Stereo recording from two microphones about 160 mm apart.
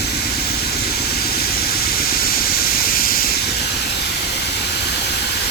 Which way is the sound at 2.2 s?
70° left (ahead or behind).